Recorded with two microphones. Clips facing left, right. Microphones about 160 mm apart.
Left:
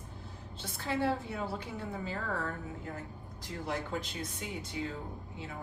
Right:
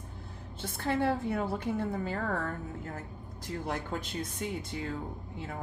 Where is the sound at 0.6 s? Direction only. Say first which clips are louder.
Right 3 dB; 55° right (ahead or behind).